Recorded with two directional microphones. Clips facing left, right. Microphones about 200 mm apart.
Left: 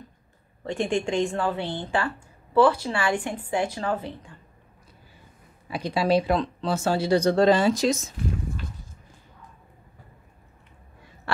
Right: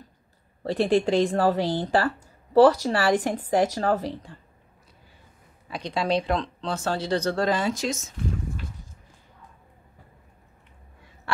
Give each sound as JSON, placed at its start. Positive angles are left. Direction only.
{"t": 0.7, "sound": "a woman's voice", "side_deg": -35}
{"t": 5.7, "sound": "speech", "side_deg": 5}
{"t": 7.4, "sound": "speech", "side_deg": 30}